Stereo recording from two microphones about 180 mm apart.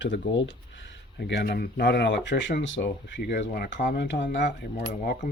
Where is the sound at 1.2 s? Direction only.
65° left (ahead or behind); by 4.9 s 80° left.